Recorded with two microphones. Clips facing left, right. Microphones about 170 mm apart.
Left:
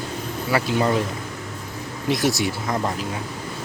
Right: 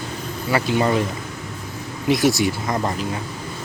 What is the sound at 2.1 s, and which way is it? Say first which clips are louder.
Mantra: right 4 dB; centre (ahead or behind).